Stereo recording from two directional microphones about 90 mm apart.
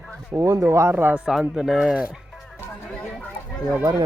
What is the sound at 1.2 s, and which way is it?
Speech, 5° right (ahead or behind).